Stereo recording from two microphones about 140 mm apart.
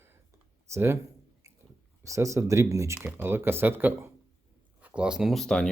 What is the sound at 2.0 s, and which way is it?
Speech, 20° right (ahead or behind).